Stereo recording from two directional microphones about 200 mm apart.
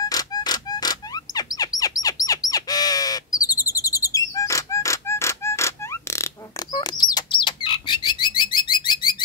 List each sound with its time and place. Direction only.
0.0 s music: 20° left (ahead or behind)